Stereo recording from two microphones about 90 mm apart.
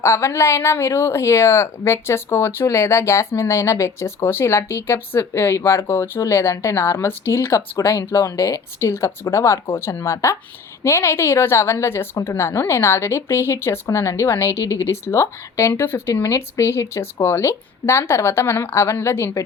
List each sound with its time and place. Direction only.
0.0 s speech: 30° left (ahead or behind)